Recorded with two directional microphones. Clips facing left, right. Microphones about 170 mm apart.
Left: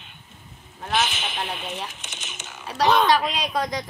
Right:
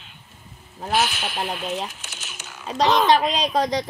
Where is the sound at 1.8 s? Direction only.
5° right (ahead or behind).